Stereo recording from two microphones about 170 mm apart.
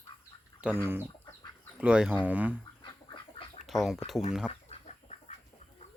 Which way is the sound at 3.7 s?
Centre (ahead or behind).